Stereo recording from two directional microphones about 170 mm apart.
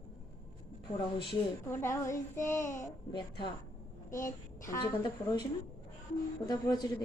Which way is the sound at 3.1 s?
30° left (ahead or behind).